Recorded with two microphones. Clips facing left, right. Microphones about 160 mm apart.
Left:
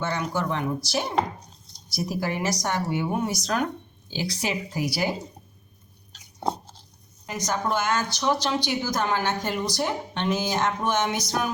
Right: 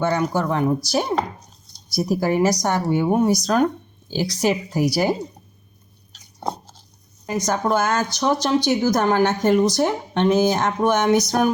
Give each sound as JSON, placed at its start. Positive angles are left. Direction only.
{"t": 0.0, "sound": "speech", "side_deg": -40}
{"t": 1.9, "sound": "speech", "side_deg": -40}
{"t": 7.3, "sound": "speech", "side_deg": -50}